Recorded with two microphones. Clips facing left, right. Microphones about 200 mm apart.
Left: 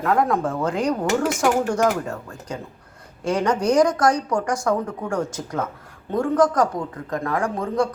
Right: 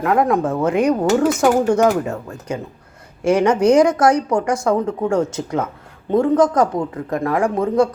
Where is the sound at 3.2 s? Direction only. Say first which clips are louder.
Right 7 dB; 75° right (ahead or behind).